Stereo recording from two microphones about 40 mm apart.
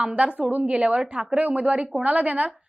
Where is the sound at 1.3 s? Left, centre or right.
Right.